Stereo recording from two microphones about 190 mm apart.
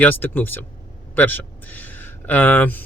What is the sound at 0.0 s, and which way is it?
Speech, 10° left (ahead or behind).